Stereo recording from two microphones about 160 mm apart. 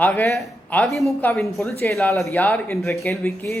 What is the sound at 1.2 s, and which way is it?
Speech, 15° left (ahead or behind).